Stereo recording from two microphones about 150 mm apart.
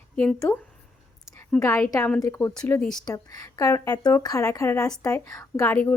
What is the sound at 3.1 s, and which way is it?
A woman's voice, 25° left (ahead or behind).